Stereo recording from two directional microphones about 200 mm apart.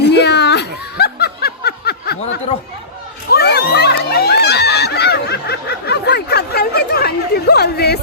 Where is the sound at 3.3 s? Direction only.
55° left (ahead or behind).